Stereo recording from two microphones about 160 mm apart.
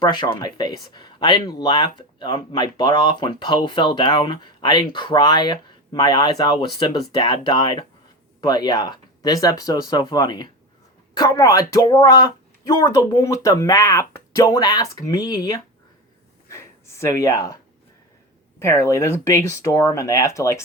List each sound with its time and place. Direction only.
0.0 s speech: 30° left (ahead or behind)
16.5 s gasp: 15° left (ahead or behind)
18.6 s speech: 15° left (ahead or behind)